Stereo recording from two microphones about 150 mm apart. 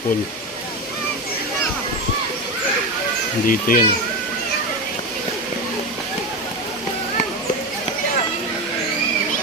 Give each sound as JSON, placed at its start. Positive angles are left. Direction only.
{"t": 3.4, "sound": "speech", "side_deg": 70}